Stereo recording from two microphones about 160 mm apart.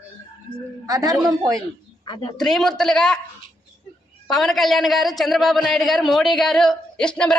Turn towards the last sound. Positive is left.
turn(degrees=5)  # may be behind; listen again after turning